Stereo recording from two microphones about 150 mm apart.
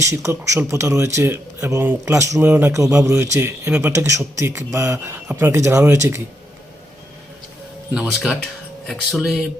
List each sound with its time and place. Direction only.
0.0 s speech: 20° right (ahead or behind)
7.9 s speech: 5° right (ahead or behind)